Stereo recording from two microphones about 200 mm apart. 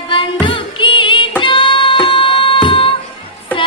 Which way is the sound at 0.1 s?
25° left (ahead or behind).